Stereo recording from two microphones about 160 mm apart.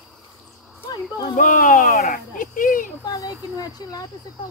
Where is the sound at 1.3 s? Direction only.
60° left (ahead or behind).